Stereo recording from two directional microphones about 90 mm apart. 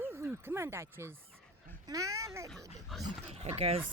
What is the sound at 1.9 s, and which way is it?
Dog, 35° right (ahead or behind).